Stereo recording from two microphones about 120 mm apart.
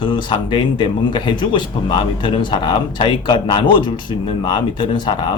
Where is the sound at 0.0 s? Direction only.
40° left (ahead or behind).